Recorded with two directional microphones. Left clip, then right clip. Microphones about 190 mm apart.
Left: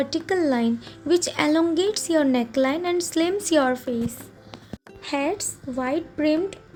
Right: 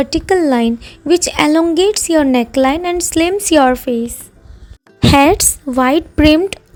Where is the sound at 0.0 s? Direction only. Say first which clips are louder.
Right 10 dB; 40° right (ahead or behind).